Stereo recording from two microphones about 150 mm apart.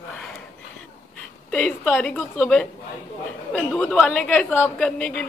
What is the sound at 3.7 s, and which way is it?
A woman's voice, 10° left (ahead or behind).